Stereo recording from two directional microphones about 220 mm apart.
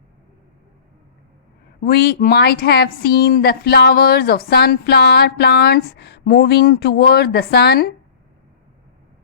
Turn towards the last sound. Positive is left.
turn(degrees=45)  # may be behind; listen again after turning